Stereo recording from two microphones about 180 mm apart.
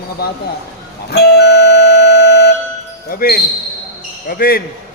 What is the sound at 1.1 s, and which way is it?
Music, 65° left (ahead or behind).